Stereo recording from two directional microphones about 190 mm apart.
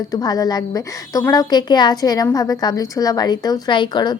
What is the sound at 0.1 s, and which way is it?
A woman's voice, 20° left (ahead or behind).